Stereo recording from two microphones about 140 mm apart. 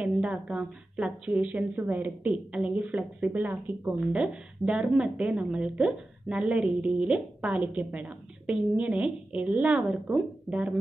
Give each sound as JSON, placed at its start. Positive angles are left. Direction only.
{"t": 0.0, "sound": "a woman's voice", "side_deg": -10}